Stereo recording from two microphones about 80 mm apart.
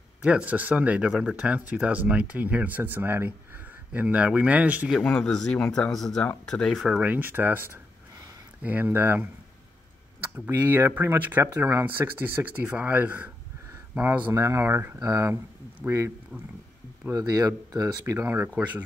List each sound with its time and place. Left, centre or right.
0.2 s speech: centre
5.0 s speech: centre
7.0 s speech: right
10.3 s speech: right
14.3 s speech: right
15.0 s speech: right
17.1 s speech: right
18.2 s speech: right
18.5 s speech: centre